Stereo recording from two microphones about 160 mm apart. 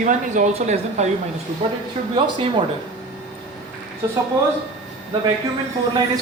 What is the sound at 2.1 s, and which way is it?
Speech, 30° right (ahead or behind).